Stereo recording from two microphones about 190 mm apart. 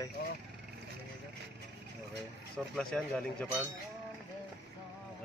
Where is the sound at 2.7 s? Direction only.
5° left (ahead or behind).